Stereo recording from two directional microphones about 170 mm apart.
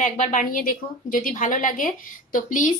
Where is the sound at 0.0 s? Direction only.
50° left (ahead or behind).